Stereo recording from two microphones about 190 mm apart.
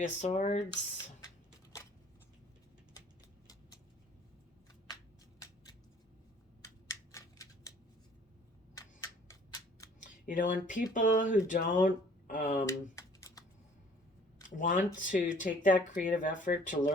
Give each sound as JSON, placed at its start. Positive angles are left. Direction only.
{"t": 0.0, "sound": "speech", "side_deg": 40}
{"t": 6.6, "sound": "scissors", "side_deg": 15}
{"t": 8.7, "sound": "a sound", "side_deg": 15}
{"t": 10.0, "sound": "speech", "side_deg": 45}
{"t": 12.6, "sound": "typing", "side_deg": 15}
{"t": 14.5, "sound": "speech", "side_deg": 45}